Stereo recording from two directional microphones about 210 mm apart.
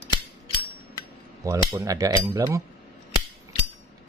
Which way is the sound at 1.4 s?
15° right (ahead or behind).